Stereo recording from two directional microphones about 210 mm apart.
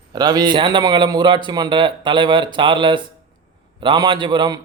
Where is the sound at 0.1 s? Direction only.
20° right (ahead or behind).